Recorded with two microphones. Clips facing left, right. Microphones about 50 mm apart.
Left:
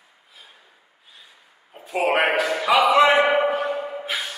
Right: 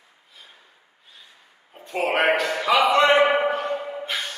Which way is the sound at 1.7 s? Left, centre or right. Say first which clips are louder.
Left 2 dB; centre.